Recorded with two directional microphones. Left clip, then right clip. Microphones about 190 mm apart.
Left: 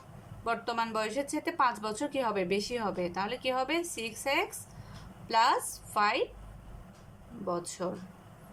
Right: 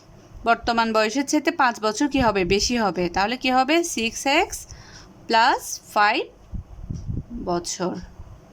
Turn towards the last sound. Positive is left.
turn(degrees=-45)  # may be behind; listen again after turning